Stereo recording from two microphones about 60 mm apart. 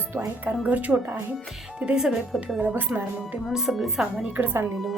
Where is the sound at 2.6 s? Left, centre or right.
Right.